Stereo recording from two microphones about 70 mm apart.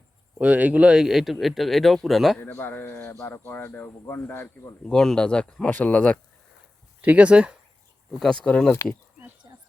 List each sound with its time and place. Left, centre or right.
0.3 s speech: right; by 2.4 s centre
2.4 s speech: left
4.9 s speech: centre
7.0 s speech: centre
8.2 s speech: centre
9.4 s a sound: right